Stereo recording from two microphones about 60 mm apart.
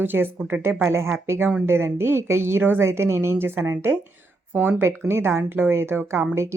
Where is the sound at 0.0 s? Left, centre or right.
Right.